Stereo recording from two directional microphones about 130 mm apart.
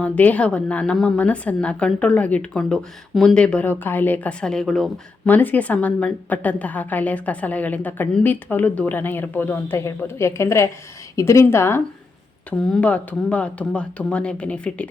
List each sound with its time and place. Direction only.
0.0 s a woman's voice: 10° left (ahead or behind)
12.5 s a woman's voice: 5° left (ahead or behind)